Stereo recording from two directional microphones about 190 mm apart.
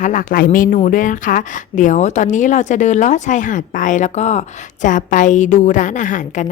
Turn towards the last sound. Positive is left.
turn(degrees=40)  # may be behind; listen again after turning